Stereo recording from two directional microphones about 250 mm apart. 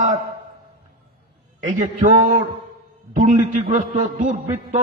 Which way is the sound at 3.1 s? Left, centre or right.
Right.